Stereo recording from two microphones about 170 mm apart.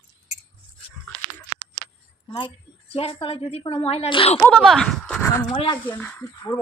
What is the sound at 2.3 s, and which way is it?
A woman's voice, 25° left (ahead or behind).